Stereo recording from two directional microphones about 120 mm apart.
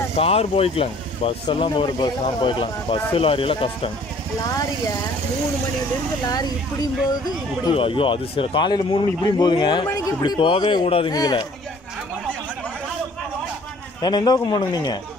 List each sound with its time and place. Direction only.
0.1 s speech: 55° left (ahead or behind)
4.4 s speech: 30° left (ahead or behind)
6.2 s speech: 35° left (ahead or behind)
7.7 s speech: 50° left (ahead or behind)
11.1 s speech: 35° left (ahead or behind)
14.0 s speech: 35° left (ahead or behind)